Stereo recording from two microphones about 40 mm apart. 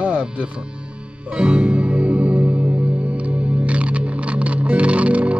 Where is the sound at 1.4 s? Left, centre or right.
Right.